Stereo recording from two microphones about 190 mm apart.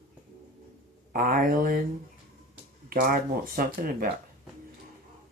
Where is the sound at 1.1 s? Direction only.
50° right (ahead or behind).